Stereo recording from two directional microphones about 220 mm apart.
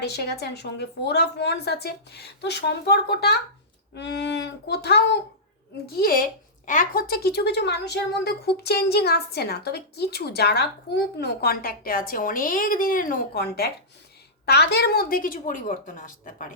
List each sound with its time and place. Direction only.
0.0 s a woman's voice: 50° left (ahead or behind)